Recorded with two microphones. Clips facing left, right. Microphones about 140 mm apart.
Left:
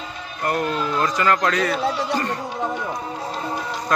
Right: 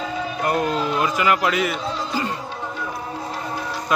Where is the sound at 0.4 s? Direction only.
20° right (ahead or behind).